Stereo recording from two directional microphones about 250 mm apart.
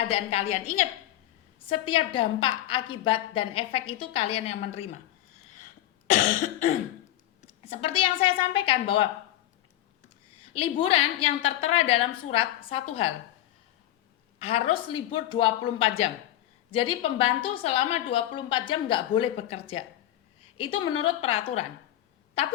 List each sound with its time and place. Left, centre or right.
0.1 s a woman's voice: left
6.1 s cough: left
7.6 s a woman's voice: left
10.4 s a woman's voice: left
14.3 s a woman's voice: left
20.4 s a sound: left
20.7 s a woman's voice: left
21.2 s a woman's voice: left